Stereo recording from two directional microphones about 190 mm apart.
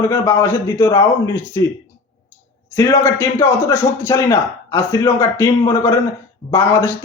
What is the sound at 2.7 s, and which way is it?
A man's voice, 15° left (ahead or behind).